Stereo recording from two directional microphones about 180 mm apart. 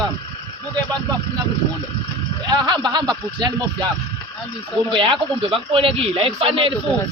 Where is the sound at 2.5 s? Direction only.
25° right (ahead or behind).